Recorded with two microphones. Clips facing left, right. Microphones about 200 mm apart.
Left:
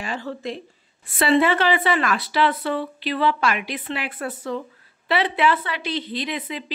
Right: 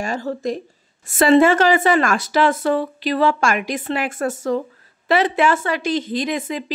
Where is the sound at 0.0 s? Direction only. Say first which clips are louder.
Right 6 dB; 45° right (ahead or behind).